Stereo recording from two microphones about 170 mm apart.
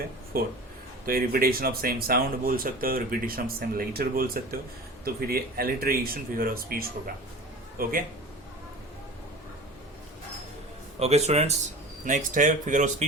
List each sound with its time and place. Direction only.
1.0 s speech: 60° right (ahead or behind)
11.0 s speech: 40° right (ahead or behind)